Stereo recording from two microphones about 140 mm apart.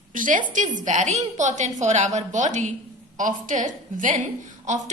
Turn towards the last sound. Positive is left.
turn(degrees=-60)  # may be behind; listen again after turning